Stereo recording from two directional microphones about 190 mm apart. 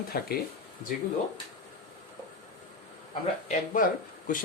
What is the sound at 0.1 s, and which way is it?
Speech, 50° left (ahead or behind).